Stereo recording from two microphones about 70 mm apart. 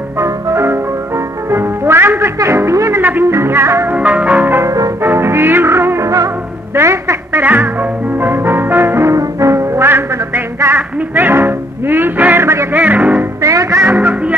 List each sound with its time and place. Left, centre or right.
0.2 s music: right
3.0 s music: right
3.9 s music: centre
4.6 s music: right
5.0 s music: right
7.4 s music: right
9.1 s music: right
11.1 s music: right
13.4 s music: right